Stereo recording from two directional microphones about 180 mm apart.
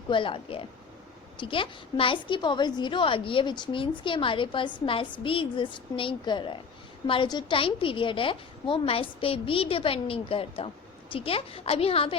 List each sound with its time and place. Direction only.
0.1 s a woman's voice: 30° left (ahead or behind)